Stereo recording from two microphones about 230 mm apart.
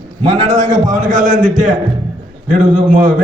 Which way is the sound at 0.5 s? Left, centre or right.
Right.